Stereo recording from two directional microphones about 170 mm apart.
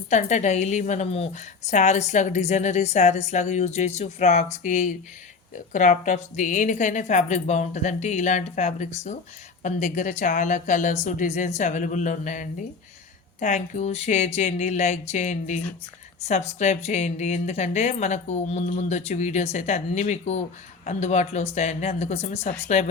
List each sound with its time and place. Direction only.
0.1 s a woman's voice: 45° left (ahead or behind)